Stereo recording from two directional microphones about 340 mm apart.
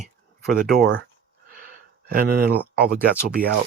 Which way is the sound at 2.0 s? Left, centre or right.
Right.